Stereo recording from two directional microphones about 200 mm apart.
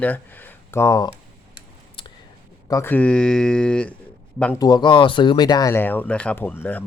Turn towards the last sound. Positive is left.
turn(degrees=10)  # may be behind; listen again after turning